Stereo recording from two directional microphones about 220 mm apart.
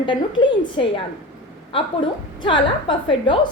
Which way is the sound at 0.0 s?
20° left (ahead or behind).